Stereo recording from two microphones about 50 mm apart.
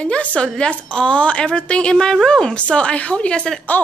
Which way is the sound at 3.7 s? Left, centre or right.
Left.